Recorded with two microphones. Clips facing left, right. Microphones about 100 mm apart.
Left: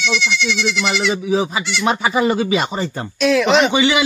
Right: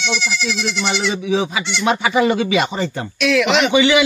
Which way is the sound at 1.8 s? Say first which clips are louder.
Right 1 dB; 35° left (ahead or behind).